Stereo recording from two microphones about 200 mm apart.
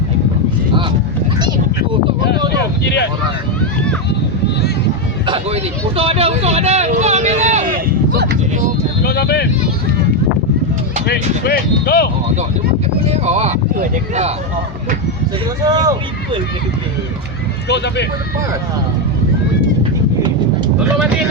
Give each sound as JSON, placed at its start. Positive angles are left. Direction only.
{"t": 0.7, "sound": "speech", "side_deg": -25}
{"t": 1.4, "sound": "a sound", "side_deg": -20}
{"t": 2.8, "sound": "speech", "side_deg": 60}
{"t": 5.2, "sound": "speech", "side_deg": -25}
{"t": 8.1, "sound": "a sound", "side_deg": -55}
{"t": 9.0, "sound": "speech", "side_deg": 55}
{"t": 11.0, "sound": "speech", "side_deg": 50}
{"t": 13.1, "sound": "speech", "side_deg": -35}
{"t": 15.6, "sound": "speech", "side_deg": -20}
{"t": 17.7, "sound": "speech", "side_deg": 60}